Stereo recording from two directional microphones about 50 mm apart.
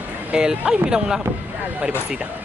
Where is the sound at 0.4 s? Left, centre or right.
Centre.